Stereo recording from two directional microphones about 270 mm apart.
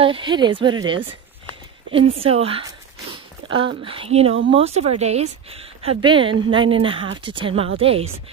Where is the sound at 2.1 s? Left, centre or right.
Right.